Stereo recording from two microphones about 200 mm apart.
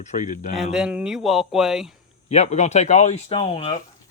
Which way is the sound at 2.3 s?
35° left (ahead or behind).